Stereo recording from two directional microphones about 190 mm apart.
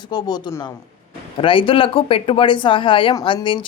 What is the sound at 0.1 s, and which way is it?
Speech, 20° left (ahead or behind).